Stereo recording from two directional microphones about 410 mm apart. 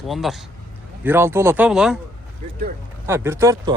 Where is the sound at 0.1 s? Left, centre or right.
Centre.